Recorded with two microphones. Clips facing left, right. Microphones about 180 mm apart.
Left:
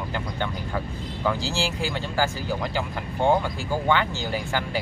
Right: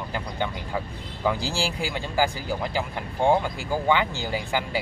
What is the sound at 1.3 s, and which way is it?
Speech, 15° right (ahead or behind).